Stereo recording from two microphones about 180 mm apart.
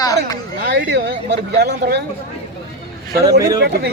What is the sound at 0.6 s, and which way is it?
Speech, 65° right (ahead or behind).